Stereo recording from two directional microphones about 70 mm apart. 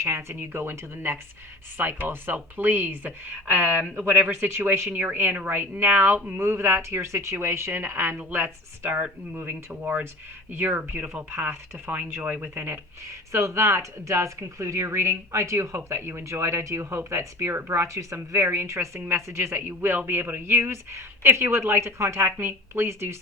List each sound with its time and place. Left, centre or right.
0.0 s speech: right
4.9 s speech: right
6.3 s speech: right
13.1 s speech: right
17.8 s speech: right
18.4 s speech: right